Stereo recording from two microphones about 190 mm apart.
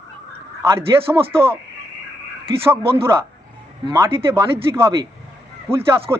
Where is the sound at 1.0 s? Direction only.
30° right (ahead or behind).